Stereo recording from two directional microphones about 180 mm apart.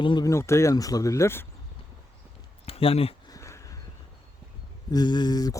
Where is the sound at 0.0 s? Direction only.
25° left (ahead or behind).